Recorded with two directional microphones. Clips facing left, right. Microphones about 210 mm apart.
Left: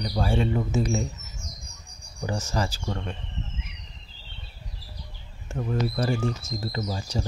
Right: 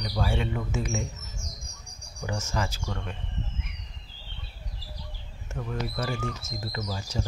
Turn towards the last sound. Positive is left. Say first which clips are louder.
# left 4 dB
turn(degrees=30)  # may be behind; listen again after turning